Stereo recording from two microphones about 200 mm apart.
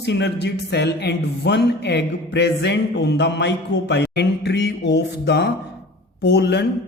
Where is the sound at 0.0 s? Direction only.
60° left (ahead or behind).